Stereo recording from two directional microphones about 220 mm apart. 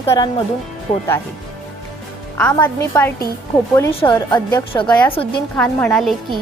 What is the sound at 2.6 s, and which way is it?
Speech, 10° left (ahead or behind).